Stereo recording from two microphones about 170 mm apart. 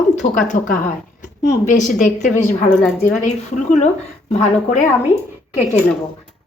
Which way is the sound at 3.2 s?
45° left (ahead or behind).